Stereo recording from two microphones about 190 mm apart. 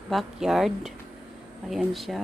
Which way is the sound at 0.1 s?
Centre (ahead or behind).